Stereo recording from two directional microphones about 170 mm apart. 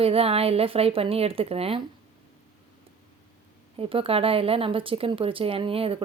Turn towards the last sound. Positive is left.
turn(degrees=-35)  # may be behind; listen again after turning